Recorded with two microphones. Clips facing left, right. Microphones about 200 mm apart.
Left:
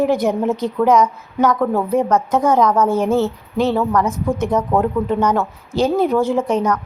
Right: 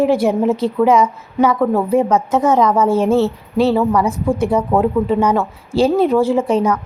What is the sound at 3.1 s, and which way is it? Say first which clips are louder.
Speech: right 3 dB; 30° right (ahead or behind).